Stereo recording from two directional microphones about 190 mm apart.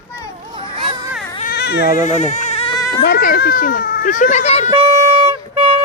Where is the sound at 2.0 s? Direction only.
40° left (ahead or behind).